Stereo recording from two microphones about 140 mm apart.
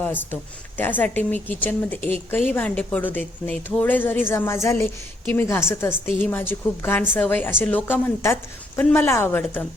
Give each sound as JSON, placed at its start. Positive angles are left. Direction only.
{"t": 0.0, "sound": "a woman's voice", "side_deg": 15}